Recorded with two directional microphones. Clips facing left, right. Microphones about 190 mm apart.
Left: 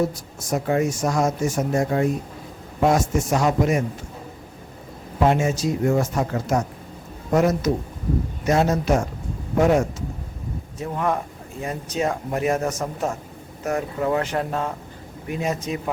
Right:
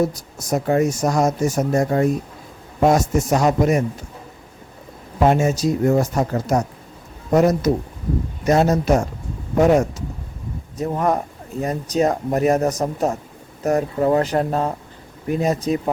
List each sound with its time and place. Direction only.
0.3 s speech: 40° right (ahead or behind)
5.2 s speech: 40° right (ahead or behind)